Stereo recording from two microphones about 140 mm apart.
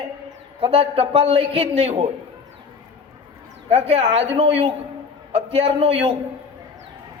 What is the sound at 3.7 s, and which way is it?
A man's voice, 45° right (ahead or behind).